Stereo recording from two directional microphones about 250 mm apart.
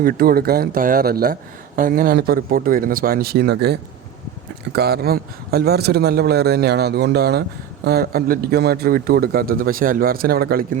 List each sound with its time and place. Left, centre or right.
0.0 s speech: right